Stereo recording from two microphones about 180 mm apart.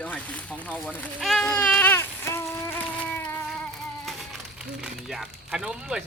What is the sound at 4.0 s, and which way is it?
Speech, centre (ahead or behind).